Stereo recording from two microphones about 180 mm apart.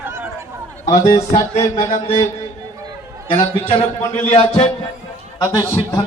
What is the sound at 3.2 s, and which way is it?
Speech, 40° left (ahead or behind).